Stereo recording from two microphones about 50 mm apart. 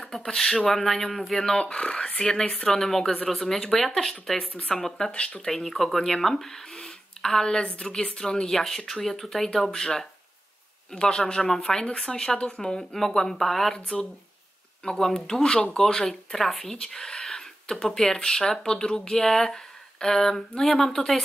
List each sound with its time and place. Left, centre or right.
0.2 s speech: centre
1.4 s speech: centre
5.5 s speech: centre
13.7 s speech: centre
15.8 s speech: centre